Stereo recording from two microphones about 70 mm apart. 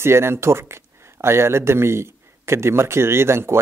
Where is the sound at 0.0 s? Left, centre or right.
Right.